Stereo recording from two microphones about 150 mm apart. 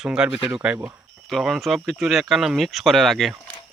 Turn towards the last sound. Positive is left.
turn(degrees=0)  # may be behind; listen again after turning